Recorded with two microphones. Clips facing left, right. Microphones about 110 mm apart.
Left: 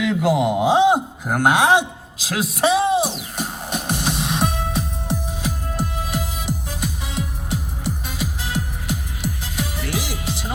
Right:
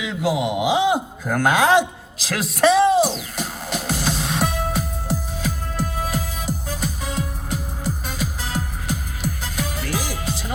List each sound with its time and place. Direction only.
0.0 s speech: 55° left (ahead or behind)
0.3 s speech: 5° right (ahead or behind)
0.6 s speech: 30° left (ahead or behind)
2.2 s music: 15° left (ahead or behind)
5.4 s music: 40° right (ahead or behind)